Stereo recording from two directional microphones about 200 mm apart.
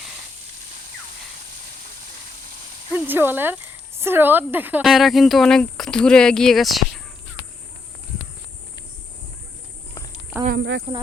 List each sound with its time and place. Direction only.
2.9 s speech: 10° right (ahead or behind)
10.4 s speech: 55° right (ahead or behind)